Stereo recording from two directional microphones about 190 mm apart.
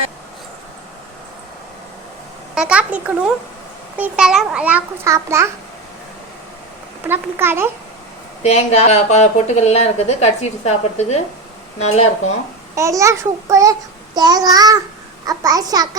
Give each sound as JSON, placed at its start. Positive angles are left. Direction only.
{"t": 2.6, "sound": "a child's voice", "side_deg": -5}
{"t": 7.1, "sound": "a child's voice", "side_deg": -10}
{"t": 8.4, "sound": "speech", "side_deg": 35}
{"t": 12.7, "sound": "a child's voice", "side_deg": -15}